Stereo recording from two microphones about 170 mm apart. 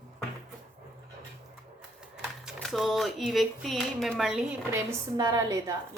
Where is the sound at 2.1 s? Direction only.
5° right (ahead or behind).